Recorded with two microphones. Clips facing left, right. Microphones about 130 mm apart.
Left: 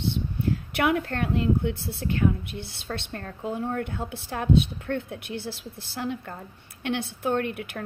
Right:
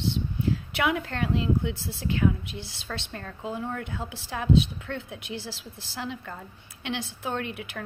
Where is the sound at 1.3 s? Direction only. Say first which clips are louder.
Left 2 dB; 55° left (ahead or behind).